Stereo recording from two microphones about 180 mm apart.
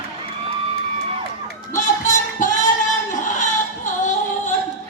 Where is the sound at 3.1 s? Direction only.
45° left (ahead or behind).